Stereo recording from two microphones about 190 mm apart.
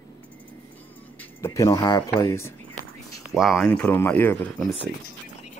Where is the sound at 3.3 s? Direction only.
Centre (ahead or behind).